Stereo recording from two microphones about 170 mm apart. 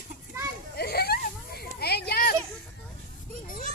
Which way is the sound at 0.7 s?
70° left (ahead or behind).